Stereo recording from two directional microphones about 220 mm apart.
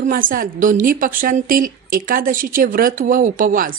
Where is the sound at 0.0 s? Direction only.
40° right (ahead or behind).